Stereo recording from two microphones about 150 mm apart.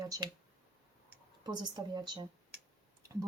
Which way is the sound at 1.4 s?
30° right (ahead or behind).